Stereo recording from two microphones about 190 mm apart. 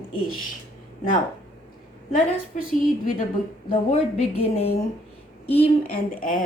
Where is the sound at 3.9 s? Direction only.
30° left (ahead or behind).